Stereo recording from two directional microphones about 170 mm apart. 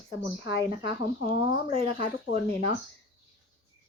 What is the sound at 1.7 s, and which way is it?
Speech, 35° right (ahead or behind).